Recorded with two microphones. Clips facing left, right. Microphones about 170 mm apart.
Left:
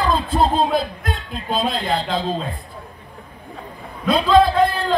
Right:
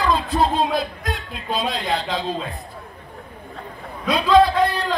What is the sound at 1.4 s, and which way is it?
A man's voice, 25° left (ahead or behind).